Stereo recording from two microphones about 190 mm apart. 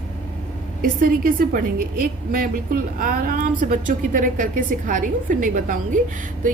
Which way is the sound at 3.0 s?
50° right (ahead or behind).